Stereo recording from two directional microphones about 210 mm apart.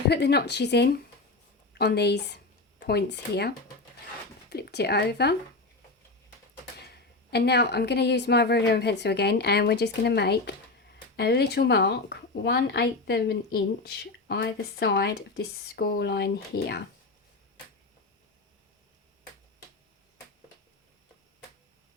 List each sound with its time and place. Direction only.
0.1 s a woman's voice: 50° left (ahead or behind)
7.3 s a woman's voice: 50° left (ahead or behind)